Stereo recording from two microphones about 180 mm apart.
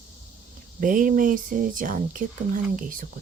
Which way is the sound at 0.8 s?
50° right (ahead or behind).